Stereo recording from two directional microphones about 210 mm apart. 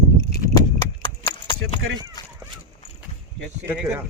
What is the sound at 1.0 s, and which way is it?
Clip-clop, 20° left (ahead or behind).